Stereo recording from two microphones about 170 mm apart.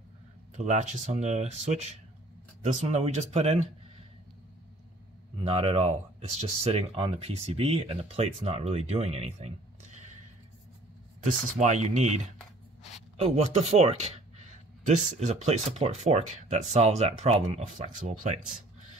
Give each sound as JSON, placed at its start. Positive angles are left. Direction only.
{"t": 0.6, "sound": "speech", "side_deg": -45}
{"t": 5.4, "sound": "speech", "side_deg": -35}
{"t": 11.6, "sound": "speech", "side_deg": -40}
{"t": 13.2, "sound": "speech", "side_deg": -40}